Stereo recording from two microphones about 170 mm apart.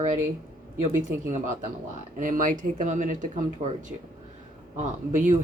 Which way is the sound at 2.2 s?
50° right (ahead or behind).